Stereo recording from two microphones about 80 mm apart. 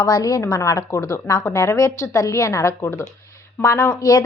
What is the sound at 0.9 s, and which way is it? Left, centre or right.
A woman's voice, left.